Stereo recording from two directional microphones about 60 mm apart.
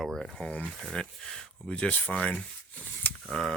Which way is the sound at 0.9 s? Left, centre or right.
Centre.